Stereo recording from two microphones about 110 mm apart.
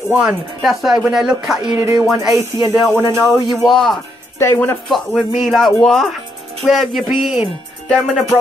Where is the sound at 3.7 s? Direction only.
Centre (ahead or behind).